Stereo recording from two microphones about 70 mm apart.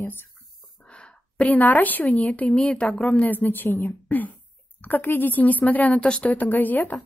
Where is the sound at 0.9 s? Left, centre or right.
Centre.